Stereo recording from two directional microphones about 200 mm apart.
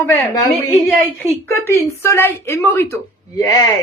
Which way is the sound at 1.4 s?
15° left (ahead or behind).